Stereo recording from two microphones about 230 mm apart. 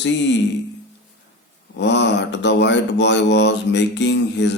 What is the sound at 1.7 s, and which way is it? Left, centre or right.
Speech, left.